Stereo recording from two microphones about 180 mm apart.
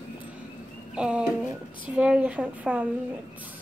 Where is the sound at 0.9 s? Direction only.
5° right (ahead or behind).